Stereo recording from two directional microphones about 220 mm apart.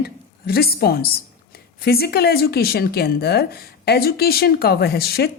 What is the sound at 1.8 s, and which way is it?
A woman's voice, 45° left (ahead or behind).